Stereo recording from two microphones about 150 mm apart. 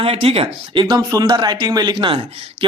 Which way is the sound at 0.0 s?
40° right (ahead or behind).